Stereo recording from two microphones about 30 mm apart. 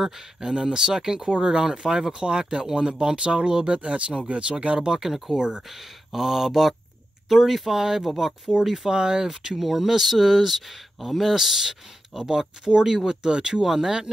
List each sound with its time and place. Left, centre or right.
0.4 s speech: right
5.0 s speech: centre
8.9 s speech: right
9.6 s speech: centre
11.3 s speech: centre
12.2 s speech: right